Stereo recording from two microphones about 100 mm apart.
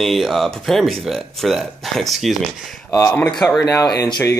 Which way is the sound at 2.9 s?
25° left (ahead or behind).